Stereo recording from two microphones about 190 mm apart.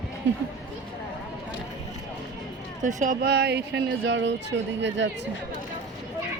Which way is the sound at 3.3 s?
60° right (ahead or behind).